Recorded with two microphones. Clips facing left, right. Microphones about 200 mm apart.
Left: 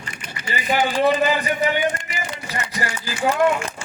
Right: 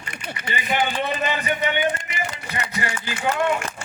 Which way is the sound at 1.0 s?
35° left (ahead or behind).